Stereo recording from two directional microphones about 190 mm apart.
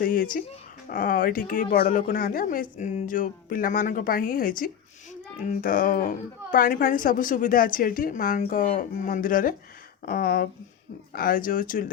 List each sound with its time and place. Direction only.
0.0 s speech: 45° left (ahead or behind)